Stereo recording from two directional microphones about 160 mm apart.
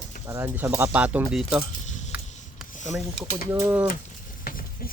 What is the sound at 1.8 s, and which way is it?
Keys jangling, 50° left (ahead or behind).